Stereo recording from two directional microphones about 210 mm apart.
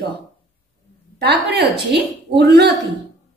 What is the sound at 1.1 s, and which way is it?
A woman's voice, 50° right (ahead or behind).